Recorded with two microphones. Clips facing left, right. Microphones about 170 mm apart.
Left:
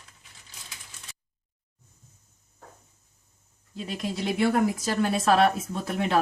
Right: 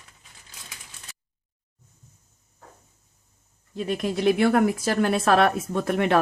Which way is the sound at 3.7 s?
55° right (ahead or behind).